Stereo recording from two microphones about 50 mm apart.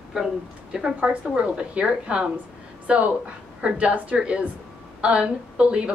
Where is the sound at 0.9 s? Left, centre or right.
Right.